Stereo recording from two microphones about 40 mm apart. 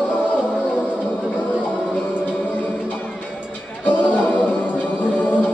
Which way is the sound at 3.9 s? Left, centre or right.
Left.